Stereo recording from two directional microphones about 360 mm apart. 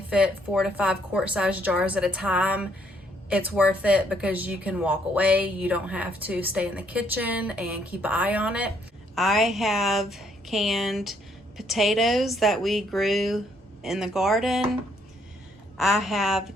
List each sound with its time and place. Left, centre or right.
0.1 s speech: centre
15.8 s speech: centre